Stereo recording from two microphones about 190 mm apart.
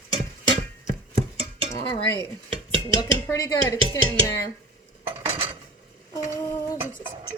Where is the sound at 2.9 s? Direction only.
20° left (ahead or behind).